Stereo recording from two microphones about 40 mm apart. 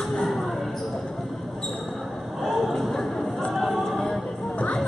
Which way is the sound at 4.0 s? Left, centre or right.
Centre.